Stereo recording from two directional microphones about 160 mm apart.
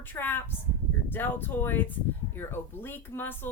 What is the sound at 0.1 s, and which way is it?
Speech, 10° left (ahead or behind).